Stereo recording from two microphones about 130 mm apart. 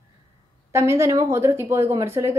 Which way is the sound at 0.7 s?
20° right (ahead or behind).